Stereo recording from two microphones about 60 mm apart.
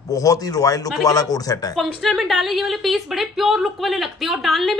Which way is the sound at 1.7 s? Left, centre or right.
Centre.